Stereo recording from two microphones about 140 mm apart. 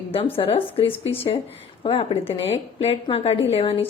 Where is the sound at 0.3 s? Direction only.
40° left (ahead or behind).